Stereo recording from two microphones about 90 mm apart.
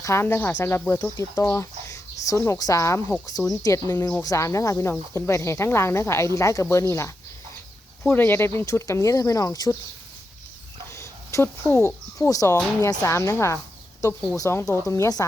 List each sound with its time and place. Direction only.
0.0 s speech: 30° left (ahead or behind)
1.4 s a sound: 30° left (ahead or behind)
2.6 s speech: 40° left (ahead or behind)
8.0 s speech: 20° left (ahead or behind); by 9.7 s 35° left (ahead or behind)
10.9 s a sound: 35° left (ahead or behind)
11.6 s speech: 25° left (ahead or behind)
12.3 s speech: 40° left (ahead or behind)